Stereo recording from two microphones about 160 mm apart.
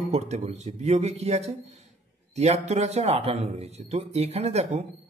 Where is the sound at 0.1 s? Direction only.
45° right (ahead or behind).